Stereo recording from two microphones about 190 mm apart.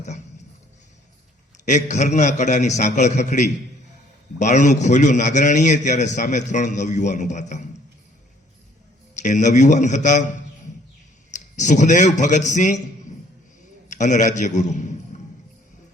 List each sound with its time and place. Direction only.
1.6 s a man's voice: 40° left (ahead or behind)
9.1 s a man's voice: 40° left (ahead or behind)
11.3 s a man's voice: 40° left (ahead or behind)
13.8 s a man's voice: 40° left (ahead or behind)